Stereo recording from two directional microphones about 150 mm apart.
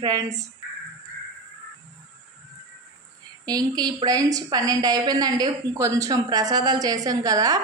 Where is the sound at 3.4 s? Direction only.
25° right (ahead or behind).